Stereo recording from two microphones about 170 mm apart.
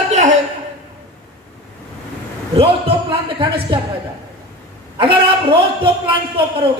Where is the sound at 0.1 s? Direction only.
45° right (ahead or behind).